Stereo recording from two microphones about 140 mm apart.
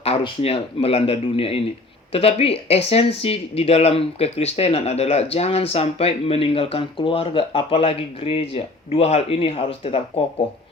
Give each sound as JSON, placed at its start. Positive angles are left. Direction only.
{"t": 0.0, "sound": "speech", "side_deg": 45}